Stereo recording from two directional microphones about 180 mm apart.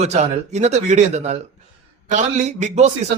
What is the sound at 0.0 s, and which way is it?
A man's voice, 40° right (ahead or behind).